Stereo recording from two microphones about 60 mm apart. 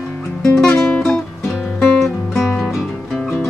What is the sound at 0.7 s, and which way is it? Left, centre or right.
Music, left.